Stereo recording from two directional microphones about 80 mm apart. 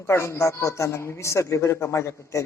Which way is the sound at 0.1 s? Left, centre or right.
Left.